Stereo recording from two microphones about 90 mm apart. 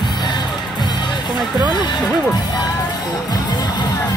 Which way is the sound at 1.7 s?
55° left (ahead or behind).